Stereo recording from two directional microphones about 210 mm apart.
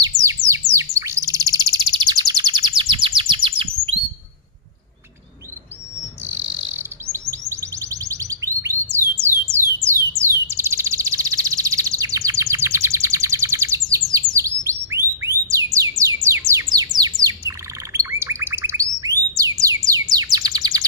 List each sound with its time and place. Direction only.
0.0 s chirp: 15° right (ahead or behind)
6.2 s chirp: 10° right (ahead or behind)
9.2 s a sound: 10° right (ahead or behind)
9.8 s bird: 10° right (ahead or behind)
15.5 s music: 15° right (ahead or behind)
16.3 s bird: 10° right (ahead or behind)